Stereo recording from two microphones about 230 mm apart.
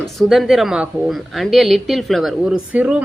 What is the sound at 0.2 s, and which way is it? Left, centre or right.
A woman's voice, centre.